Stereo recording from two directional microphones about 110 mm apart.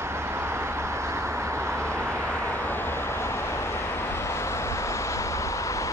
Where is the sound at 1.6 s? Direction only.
5° left (ahead or behind).